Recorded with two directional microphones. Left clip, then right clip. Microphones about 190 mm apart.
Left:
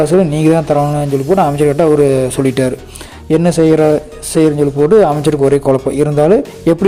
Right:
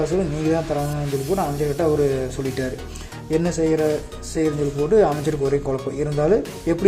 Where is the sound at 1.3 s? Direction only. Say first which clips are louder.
Left 13 dB; 45° left (ahead or behind).